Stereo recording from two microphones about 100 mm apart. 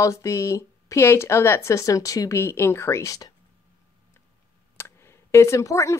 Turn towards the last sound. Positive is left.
turn(degrees=30)  # may be behind; listen again after turning